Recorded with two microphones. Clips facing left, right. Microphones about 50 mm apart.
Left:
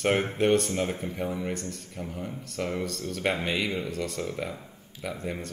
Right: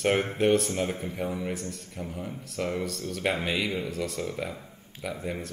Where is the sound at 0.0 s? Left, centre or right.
Centre.